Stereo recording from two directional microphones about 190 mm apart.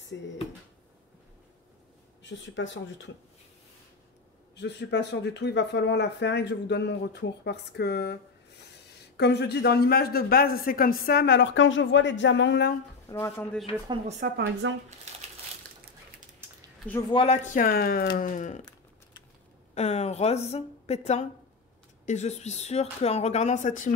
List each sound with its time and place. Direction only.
0.1 s speech: 65° left (ahead or behind)
2.2 s speech: 75° left (ahead or behind)
4.6 s speech: 65° left (ahead or behind)
13.1 s speech: 10° left (ahead or behind)
14.3 s speech: 80° right
17.1 s speech: 30° left (ahead or behind)
17.5 s speech: 50° left (ahead or behind)
19.7 s speech: 35° left (ahead or behind)